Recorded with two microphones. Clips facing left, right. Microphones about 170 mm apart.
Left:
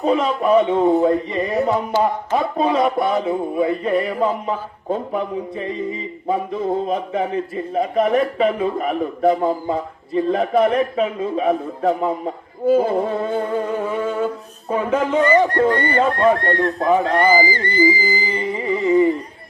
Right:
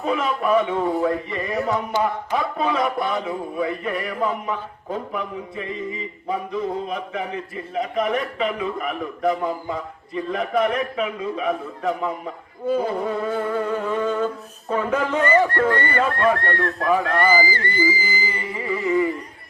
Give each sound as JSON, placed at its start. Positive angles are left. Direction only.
{"t": 0.0, "sound": "music", "side_deg": 25}
{"t": 6.9, "sound": "a man's voice", "side_deg": 30}
{"t": 12.8, "sound": "music", "side_deg": 30}